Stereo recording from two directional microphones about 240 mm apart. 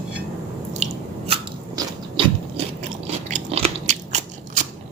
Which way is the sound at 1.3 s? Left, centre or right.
Right.